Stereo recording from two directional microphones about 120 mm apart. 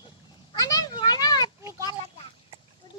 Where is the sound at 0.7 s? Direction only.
40° left (ahead or behind).